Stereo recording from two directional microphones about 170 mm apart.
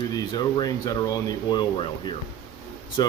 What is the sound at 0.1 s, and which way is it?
A man's voice, 25° left (ahead or behind).